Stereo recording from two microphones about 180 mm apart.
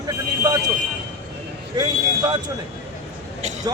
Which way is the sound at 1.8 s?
20° right (ahead or behind).